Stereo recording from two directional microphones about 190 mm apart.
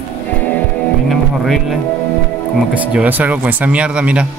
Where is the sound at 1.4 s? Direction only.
Centre (ahead or behind).